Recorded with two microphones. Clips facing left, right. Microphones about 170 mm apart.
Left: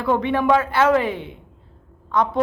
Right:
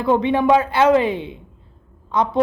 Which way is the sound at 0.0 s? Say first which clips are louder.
Right 3 dB; 20° right (ahead or behind).